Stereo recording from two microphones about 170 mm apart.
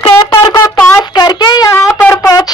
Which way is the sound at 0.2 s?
25° left (ahead or behind).